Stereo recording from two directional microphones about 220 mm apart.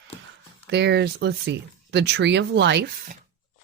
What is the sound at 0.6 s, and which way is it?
Speech, 50° right (ahead or behind).